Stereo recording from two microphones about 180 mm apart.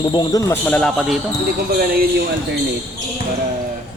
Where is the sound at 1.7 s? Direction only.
55° right (ahead or behind).